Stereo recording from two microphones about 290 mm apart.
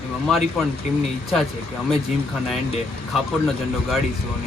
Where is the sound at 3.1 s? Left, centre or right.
Centre.